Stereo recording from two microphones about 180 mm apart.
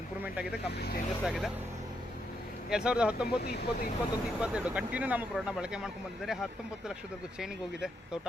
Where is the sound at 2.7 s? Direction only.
5° right (ahead or behind).